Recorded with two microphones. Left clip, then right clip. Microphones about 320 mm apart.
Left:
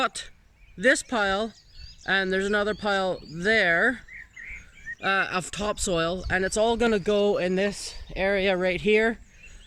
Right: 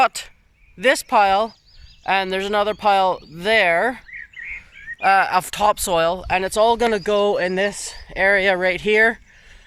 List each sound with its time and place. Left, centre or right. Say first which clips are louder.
0.0 s speech: right 10 dB; centre
5.0 s speech: right 9 dB; centre